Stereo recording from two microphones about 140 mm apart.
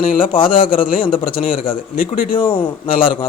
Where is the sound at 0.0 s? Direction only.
80° left.